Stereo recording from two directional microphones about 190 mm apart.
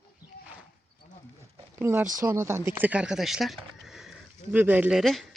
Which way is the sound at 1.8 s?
10° right (ahead or behind).